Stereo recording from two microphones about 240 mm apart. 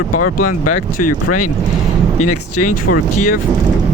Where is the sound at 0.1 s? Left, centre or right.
Left.